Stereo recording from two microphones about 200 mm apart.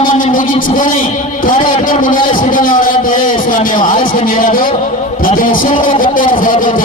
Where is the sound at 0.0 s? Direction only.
40° left (ahead or behind).